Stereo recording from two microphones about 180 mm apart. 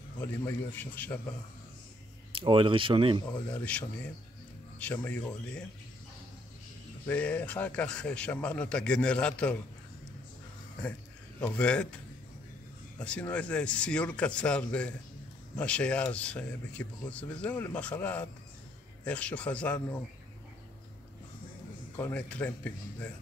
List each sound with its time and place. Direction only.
0.2 s speech: 10° left (ahead or behind)
2.3 s speech: 30° right (ahead or behind)
3.5 s speech: 10° left (ahead or behind)
7.1 s speech: 5° left (ahead or behind)
10.8 s a man's voice: 5° left (ahead or behind)
13.0 s speech: 5° left (ahead or behind)
21.9 s speech: 10° left (ahead or behind)